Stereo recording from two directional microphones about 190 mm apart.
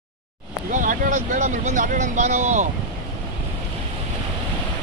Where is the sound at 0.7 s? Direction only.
45° right (ahead or behind).